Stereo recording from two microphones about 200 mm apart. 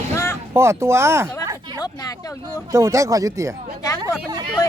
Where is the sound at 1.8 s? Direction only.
20° left (ahead or behind).